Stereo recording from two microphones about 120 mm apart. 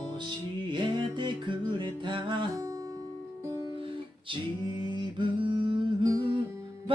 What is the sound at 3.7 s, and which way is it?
Music, 45° right (ahead or behind).